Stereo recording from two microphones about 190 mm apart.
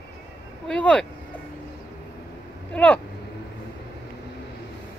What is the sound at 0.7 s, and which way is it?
Speech, 5° left (ahead or behind).